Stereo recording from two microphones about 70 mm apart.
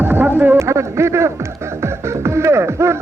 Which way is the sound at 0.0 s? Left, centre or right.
Right.